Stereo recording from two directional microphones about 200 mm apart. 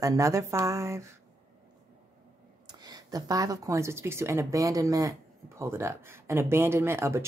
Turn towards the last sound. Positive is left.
turn(degrees=-15)  # may be behind; listen again after turning